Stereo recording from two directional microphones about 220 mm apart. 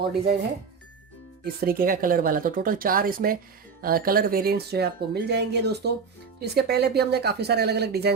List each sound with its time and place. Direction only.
1.5 s speech: 45° right (ahead or behind)